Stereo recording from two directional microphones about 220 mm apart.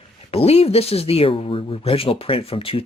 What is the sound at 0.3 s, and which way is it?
Speech, 25° left (ahead or behind).